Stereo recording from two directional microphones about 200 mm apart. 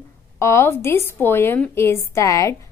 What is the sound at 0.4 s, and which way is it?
A woman's voice, 15° left (ahead or behind).